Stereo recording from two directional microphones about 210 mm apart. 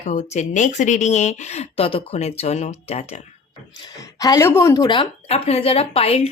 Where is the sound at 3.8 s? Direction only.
15° left (ahead or behind).